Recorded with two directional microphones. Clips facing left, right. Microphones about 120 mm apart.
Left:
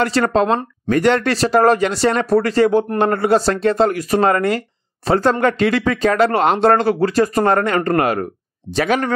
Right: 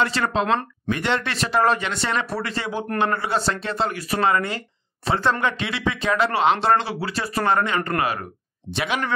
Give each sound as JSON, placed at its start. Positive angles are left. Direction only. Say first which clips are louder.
{"t": 0.0, "sound": "speech", "louder": "left 6 dB", "side_deg": 40}